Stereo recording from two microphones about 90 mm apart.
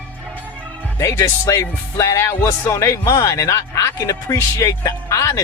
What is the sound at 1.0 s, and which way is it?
Music, 35° left (ahead or behind).